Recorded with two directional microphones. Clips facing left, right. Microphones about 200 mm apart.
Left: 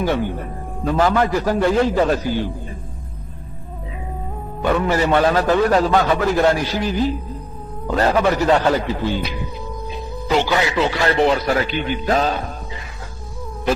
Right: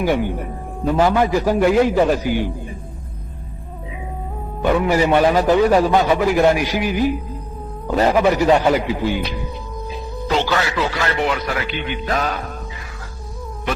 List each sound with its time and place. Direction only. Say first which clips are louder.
0.0 s a man's voice: right 1 dB; 15° right (ahead or behind)
4.6 s a man's voice: right 2 dB; 10° right (ahead or behind)
10.4 s a man's voice: left 2 dB; 15° left (ahead or behind)